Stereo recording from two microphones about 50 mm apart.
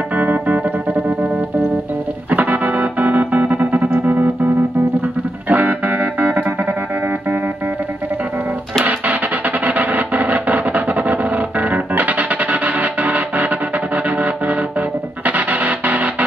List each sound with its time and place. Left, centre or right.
0.1 s music: right
2.3 s music: right
8.8 s music: right